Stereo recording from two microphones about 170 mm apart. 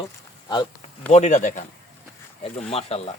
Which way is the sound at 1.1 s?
45° left (ahead or behind).